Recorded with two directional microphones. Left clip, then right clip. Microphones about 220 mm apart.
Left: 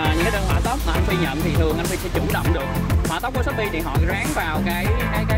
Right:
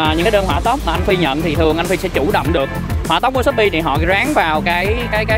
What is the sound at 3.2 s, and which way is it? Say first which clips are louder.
Speech: right 12 dB; 45° right (ahead or behind).